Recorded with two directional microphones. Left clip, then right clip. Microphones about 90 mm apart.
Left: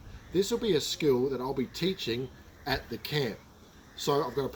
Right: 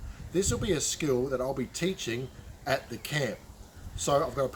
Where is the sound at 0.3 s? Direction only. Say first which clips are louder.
Left 2 dB; 35° right (ahead or behind).